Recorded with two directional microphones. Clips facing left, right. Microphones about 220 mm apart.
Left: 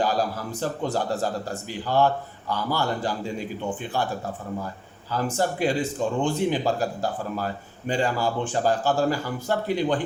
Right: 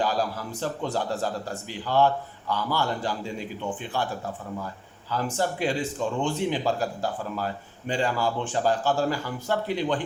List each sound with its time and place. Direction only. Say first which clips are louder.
0.0 s a man's voice: left 2 dB; 45° left (ahead or behind)
5.1 s a man's voice: left 2 dB; 45° left (ahead or behind)